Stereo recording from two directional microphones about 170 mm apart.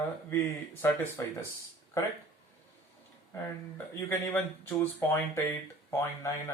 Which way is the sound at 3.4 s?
15° left (ahead or behind).